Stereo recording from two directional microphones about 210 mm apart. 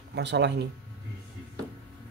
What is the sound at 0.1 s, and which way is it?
Speech, 55° right (ahead or behind).